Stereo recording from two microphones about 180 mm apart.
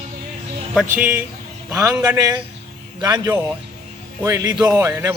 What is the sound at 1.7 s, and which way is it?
A man's voice, 15° right (ahead or behind).